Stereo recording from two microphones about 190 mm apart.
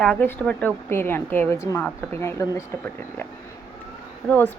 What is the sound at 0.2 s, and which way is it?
Speech, 10° left (ahead or behind).